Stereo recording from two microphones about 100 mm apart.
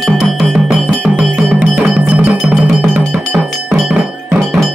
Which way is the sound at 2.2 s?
5° right (ahead or behind).